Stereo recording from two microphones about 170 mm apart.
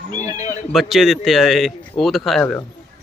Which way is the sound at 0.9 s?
Centre (ahead or behind).